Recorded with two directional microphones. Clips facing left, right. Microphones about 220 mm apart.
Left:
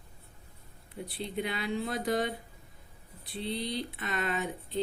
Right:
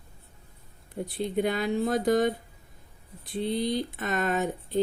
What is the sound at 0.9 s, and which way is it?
Speech, 45° right (ahead or behind).